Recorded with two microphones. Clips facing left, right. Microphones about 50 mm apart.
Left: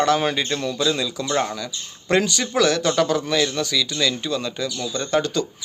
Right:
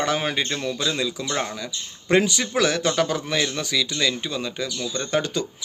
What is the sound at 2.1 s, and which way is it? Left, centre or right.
Speech, right.